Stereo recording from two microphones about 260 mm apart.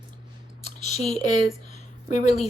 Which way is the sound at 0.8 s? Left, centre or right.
Left.